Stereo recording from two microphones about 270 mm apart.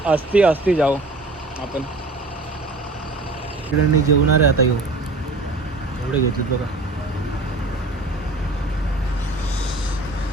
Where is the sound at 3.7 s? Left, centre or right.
Left.